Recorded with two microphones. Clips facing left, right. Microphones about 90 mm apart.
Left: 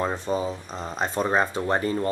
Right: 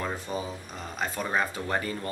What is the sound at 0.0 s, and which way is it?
Speech, 25° left (ahead or behind).